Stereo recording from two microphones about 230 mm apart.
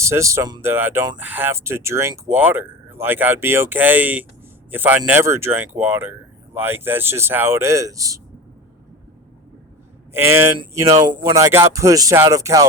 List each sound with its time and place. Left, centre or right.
0.0 s speech: centre
10.1 s speech: centre